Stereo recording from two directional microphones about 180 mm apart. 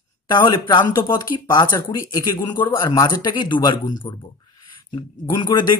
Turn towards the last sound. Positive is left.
turn(degrees=25)  # may be behind; listen again after turning